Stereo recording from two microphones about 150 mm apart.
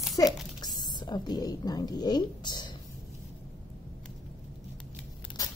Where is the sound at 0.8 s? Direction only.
30° left (ahead or behind).